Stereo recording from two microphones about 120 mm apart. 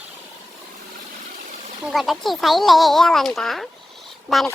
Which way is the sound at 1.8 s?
Centre (ahead or behind).